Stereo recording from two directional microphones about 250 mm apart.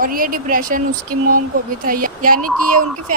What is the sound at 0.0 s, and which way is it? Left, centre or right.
Speech, right.